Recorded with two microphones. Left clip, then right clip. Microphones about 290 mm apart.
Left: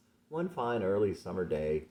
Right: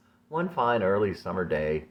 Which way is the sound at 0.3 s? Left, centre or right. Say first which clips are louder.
Right 8 dB; centre.